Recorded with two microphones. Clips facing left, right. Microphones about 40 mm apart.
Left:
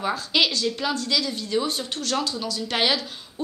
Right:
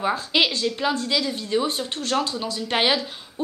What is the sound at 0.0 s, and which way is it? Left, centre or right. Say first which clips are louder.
Speech: right 1 dB; centre.